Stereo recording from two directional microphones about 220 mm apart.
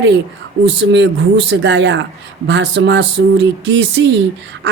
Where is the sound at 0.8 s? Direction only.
55° right (ahead or behind).